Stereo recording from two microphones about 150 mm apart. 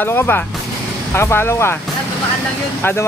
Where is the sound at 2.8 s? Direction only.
15° left (ahead or behind).